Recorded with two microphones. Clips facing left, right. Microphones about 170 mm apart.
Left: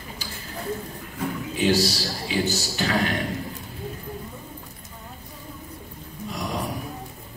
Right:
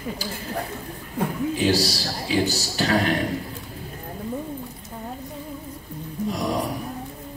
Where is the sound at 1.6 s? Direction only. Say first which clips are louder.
Left 2 dB; 35° right (ahead or behind).